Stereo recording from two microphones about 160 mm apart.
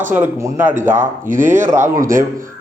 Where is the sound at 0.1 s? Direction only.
15° right (ahead or behind).